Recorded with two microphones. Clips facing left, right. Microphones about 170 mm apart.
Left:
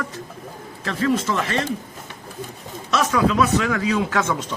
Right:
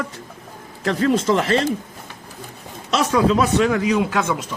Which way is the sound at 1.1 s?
30° right (ahead or behind).